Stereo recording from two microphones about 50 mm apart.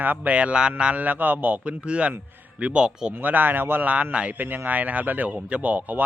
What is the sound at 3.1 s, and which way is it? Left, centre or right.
Speech, right.